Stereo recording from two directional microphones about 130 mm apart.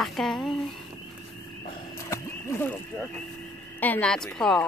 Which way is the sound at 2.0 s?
20° left (ahead or behind).